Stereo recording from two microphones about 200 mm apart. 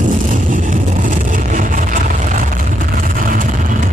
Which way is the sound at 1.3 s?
40° right (ahead or behind).